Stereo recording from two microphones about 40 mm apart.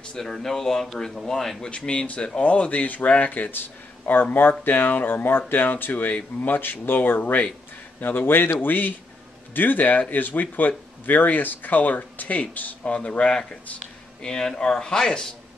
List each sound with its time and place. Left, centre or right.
0.0 s speech: centre
1.8 s speech: left
3.5 s speech: left
7.2 s speech: left
8.0 s speech: left
8.5 s speech: left
14.2 s speech: centre